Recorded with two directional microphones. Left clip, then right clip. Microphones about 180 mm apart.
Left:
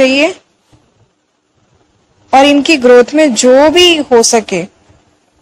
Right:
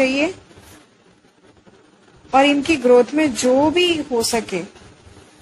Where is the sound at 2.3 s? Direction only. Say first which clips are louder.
Left 9 dB; 45° left (ahead or behind).